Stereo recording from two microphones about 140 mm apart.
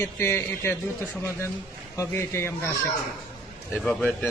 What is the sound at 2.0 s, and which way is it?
Speech, 20° left (ahead or behind).